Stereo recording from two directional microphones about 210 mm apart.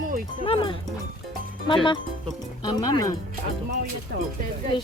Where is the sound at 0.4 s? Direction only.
25° left (ahead or behind).